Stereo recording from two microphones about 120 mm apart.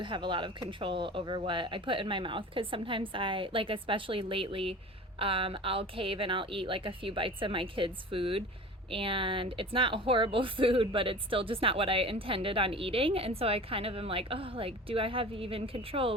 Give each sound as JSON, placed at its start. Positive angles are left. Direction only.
{"t": 0.0, "sound": "speech", "side_deg": -40}